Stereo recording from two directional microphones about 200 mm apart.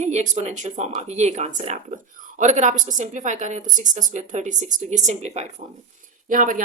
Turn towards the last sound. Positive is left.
turn(degrees=-40)  # may be behind; listen again after turning